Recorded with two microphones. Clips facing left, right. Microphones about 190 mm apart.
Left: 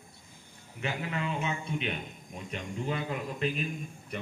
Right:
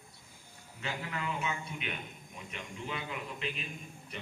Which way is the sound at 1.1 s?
25° left (ahead or behind).